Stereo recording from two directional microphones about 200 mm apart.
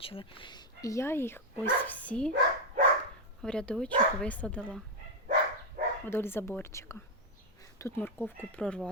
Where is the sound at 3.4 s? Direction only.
5° left (ahead or behind).